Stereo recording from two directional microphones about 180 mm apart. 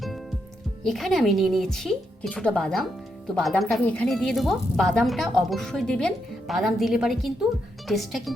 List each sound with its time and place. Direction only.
0.9 s speech: centre (ahead or behind)